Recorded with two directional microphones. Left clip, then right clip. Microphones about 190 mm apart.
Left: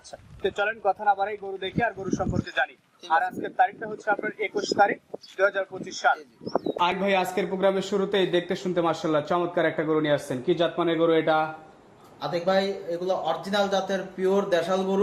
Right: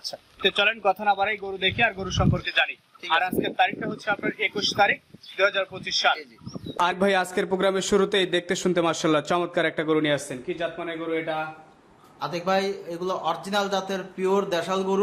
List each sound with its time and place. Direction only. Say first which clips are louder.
0.0 s speech: right 5 dB; centre (ahead or behind)
6.7 s a man's voice: right 3 dB; 30° right (ahead or behind)
10.5 s speech: left 6 dB; 40° left (ahead or behind)
12.2 s a man's voice: left 1 dB; 40° right (ahead or behind)